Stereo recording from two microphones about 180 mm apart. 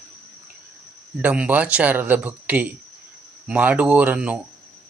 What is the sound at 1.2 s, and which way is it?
Speech, 10° right (ahead or behind).